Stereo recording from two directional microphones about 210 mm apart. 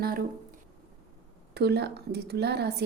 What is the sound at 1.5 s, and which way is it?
Speech, 50° right (ahead or behind).